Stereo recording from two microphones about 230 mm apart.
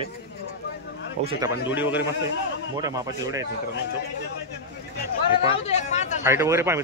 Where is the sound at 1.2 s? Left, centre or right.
Right.